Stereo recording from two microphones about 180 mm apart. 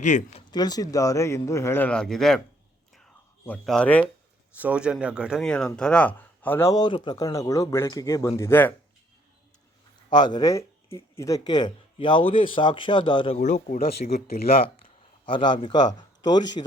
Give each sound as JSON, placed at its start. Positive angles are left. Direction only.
{"t": 0.0, "sound": "speech", "side_deg": 40}
{"t": 0.5, "sound": "speech", "side_deg": 20}
{"t": 3.4, "sound": "speech", "side_deg": 5}
{"t": 4.5, "sound": "speech", "side_deg": -5}
{"t": 10.1, "sound": "speech", "side_deg": 25}
{"t": 13.3, "sound": "speech", "side_deg": 40}
{"t": 16.6, "sound": "speech", "side_deg": 30}